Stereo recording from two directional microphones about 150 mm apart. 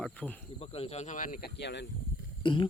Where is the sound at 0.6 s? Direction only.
40° left (ahead or behind); by 1.5 s 65° left (ahead or behind).